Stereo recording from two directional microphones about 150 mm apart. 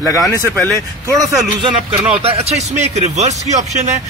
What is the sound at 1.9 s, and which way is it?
Speech, 5° right (ahead or behind).